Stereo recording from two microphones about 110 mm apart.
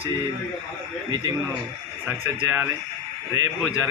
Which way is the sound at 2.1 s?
15° right (ahead or behind).